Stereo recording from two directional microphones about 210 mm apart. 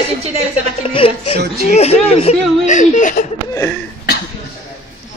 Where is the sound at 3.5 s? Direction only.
15° left (ahead or behind).